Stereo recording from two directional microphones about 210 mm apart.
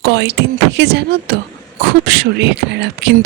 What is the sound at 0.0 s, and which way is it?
Speech, 55° right (ahead or behind).